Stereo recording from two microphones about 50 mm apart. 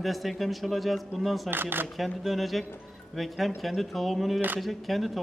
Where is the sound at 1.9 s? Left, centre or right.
Centre.